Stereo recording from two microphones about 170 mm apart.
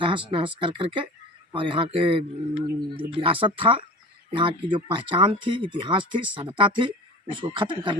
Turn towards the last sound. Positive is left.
turn(degrees=-30)  # may be behind; listen again after turning